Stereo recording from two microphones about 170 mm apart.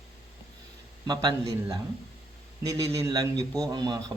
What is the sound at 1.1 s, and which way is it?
A man's voice, 25° right (ahead or behind).